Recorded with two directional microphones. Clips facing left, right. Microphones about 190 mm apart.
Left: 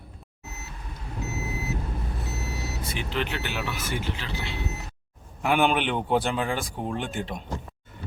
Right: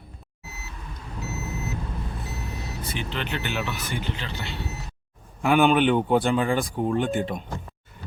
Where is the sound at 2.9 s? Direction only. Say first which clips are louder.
Left 1 dB; centre (ahead or behind).